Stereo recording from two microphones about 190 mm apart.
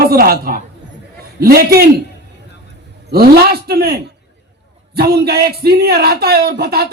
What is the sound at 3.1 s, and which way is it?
A man's voice, 55° right (ahead or behind).